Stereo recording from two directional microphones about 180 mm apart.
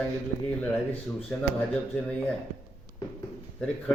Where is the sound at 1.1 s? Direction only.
5° left (ahead or behind).